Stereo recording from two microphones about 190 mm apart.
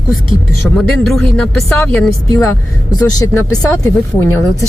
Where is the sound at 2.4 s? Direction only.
15° left (ahead or behind).